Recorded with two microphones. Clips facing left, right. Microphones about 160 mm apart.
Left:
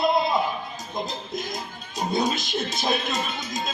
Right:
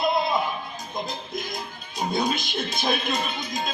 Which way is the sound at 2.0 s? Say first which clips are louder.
Left 1 dB; 40° left (ahead or behind).